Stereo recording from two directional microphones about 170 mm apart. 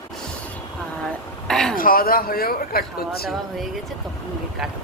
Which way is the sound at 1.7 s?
55° left (ahead or behind).